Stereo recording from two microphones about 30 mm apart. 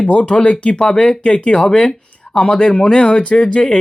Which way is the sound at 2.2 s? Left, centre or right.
Left.